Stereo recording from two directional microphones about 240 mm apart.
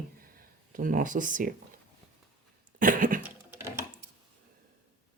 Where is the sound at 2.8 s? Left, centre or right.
Right.